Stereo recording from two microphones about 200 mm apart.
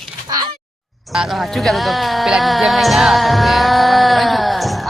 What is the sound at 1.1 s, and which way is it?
Speech, centre (ahead or behind).